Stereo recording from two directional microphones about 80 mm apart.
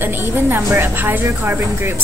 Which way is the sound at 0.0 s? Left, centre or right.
Right.